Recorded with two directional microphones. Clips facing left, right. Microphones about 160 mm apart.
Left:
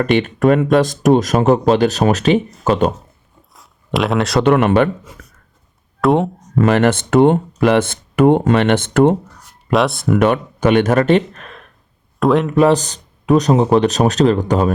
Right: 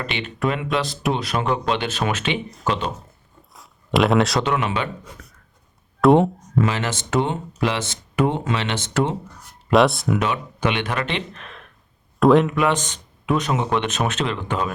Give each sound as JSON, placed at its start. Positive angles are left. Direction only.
{"t": 0.0, "sound": "speech", "side_deg": 50}
{"t": 3.5, "sound": "a sound", "side_deg": 0}
{"t": 4.4, "sound": "speech", "side_deg": 55}
{"t": 6.0, "sound": "speech", "side_deg": 0}
{"t": 6.6, "sound": "speech", "side_deg": 60}
{"t": 9.7, "sound": "speech", "side_deg": 0}
{"t": 10.2, "sound": "speech", "side_deg": 55}
{"t": 12.2, "sound": "speech", "side_deg": 0}
{"t": 12.5, "sound": "speech", "side_deg": 35}